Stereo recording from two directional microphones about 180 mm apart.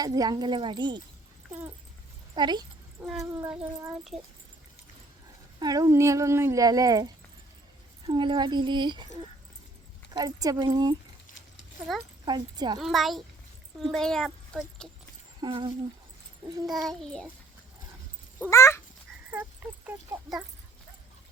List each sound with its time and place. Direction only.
0.0 s speech: 20° right (ahead or behind)
2.3 s speech: 25° right (ahead or behind)
3.0 s speech: 5° right (ahead or behind)
5.5 s speech: 20° right (ahead or behind)
10.1 s speech: 20° right (ahead or behind)
12.2 s speech: 25° right (ahead or behind)
12.8 s speech: centre (ahead or behind)
15.4 s speech: 25° right (ahead or behind)
16.6 s speech: centre (ahead or behind)
18.5 s cat: 15° left (ahead or behind)
19.3 s a sound: 10° right (ahead or behind)